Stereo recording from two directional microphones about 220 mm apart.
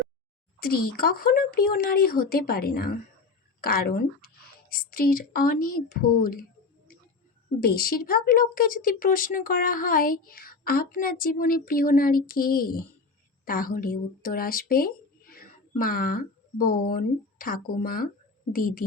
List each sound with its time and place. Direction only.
0.7 s speech: 40° left (ahead or behind)
7.6 s speech: 45° left (ahead or behind)